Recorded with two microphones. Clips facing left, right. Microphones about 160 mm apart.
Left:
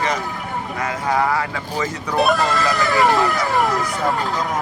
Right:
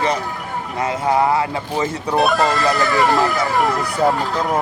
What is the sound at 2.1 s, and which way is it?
Speech, centre (ahead or behind).